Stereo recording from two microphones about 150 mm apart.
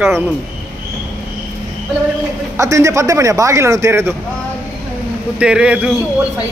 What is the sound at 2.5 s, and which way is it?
A man's voice, 20° right (ahead or behind).